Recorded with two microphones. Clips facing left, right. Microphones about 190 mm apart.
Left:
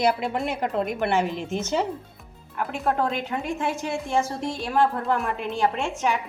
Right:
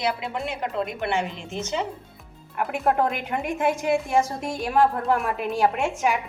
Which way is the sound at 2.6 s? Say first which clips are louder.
Right 2 dB; 15° right (ahead or behind).